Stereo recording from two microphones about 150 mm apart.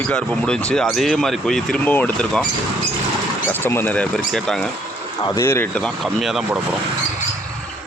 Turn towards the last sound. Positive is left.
turn(degrees=0)  # may be behind; listen again after turning